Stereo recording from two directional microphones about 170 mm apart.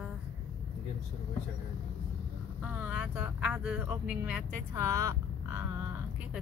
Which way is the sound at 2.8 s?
10° right (ahead or behind).